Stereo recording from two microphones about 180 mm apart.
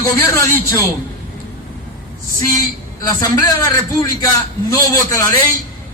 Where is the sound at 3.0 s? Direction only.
15° left (ahead or behind).